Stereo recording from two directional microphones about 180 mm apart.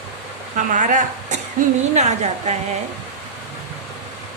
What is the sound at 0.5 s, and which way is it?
Speech, 45° right (ahead or behind).